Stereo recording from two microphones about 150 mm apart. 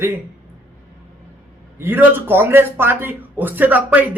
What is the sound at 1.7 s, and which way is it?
A man's voice, 15° right (ahead or behind).